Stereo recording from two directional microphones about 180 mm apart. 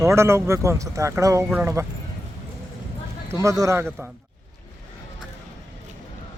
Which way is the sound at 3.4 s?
15° right (ahead or behind).